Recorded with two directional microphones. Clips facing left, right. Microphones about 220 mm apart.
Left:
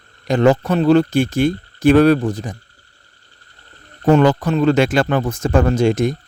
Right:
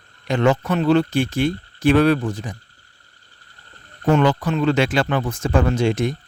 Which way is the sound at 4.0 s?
40° left (ahead or behind).